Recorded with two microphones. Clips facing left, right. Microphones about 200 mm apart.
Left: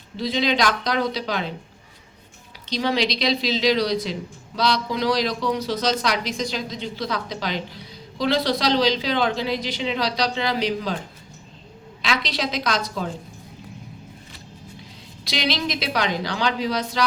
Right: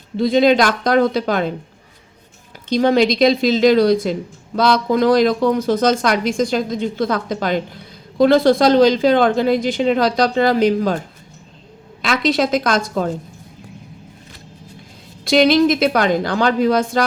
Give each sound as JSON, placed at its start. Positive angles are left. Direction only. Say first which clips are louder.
{"t": 0.2, "sound": "speech", "louder": "right 9 dB", "side_deg": -50}
{"t": 2.6, "sound": "speech", "louder": "right 9 dB", "side_deg": -50}
{"t": 12.0, "sound": "speech", "louder": "right 9 dB", "side_deg": -50}
{"t": 15.2, "sound": "speech", "louder": "right 13 dB", "side_deg": -50}